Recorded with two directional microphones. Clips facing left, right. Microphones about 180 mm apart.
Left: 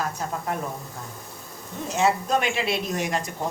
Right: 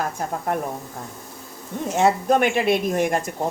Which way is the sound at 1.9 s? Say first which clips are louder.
Right 4 dB; 55° right (ahead or behind).